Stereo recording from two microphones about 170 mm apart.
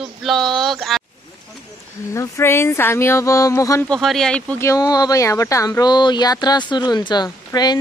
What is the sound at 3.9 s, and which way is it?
Speech, centre (ahead or behind).